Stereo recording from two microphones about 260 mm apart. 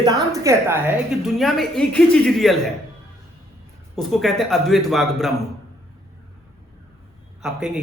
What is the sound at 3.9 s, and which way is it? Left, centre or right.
A woman's voice, centre.